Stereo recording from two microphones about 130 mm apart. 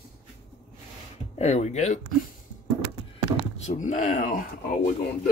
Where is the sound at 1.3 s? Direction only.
60° left (ahead or behind).